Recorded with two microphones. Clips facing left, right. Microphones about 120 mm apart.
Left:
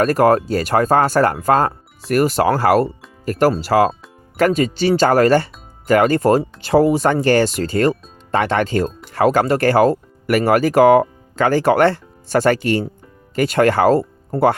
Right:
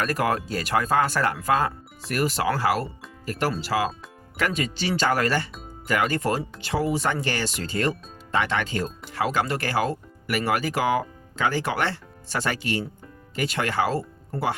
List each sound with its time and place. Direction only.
0.0 s speech: 40° left (ahead or behind)